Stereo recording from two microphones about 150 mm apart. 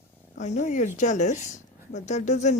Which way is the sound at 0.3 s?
55° left (ahead or behind).